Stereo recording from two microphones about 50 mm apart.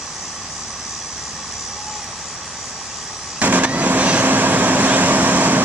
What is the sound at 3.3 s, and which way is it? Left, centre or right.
Vehicle, right.